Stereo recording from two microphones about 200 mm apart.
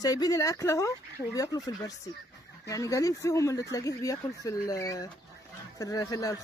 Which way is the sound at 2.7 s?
15° left (ahead or behind).